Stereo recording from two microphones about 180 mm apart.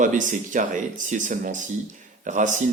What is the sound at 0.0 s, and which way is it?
Speech, 45° right (ahead or behind).